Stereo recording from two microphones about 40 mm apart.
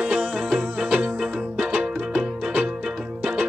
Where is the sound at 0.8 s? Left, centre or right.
Right.